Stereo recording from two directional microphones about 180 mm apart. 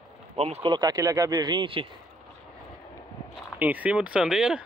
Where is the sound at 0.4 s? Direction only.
35° right (ahead or behind).